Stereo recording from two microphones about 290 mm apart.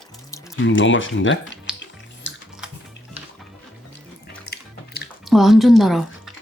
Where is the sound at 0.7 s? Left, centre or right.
Left.